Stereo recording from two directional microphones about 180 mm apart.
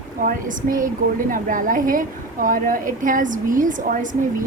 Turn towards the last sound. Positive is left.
turn(degrees=-45)  # may be behind; listen again after turning